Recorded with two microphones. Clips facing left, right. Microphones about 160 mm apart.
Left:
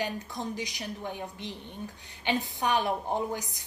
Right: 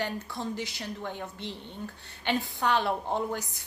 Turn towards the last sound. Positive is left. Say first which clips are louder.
# even
turn(degrees=15)  # may be behind; listen again after turning